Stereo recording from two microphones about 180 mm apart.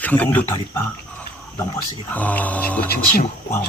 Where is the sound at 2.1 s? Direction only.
10° left (ahead or behind).